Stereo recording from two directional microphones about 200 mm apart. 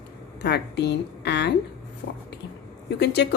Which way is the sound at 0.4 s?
55° left (ahead or behind).